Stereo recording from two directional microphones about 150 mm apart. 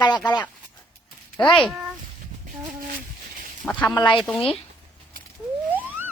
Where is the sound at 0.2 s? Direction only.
30° left (ahead or behind).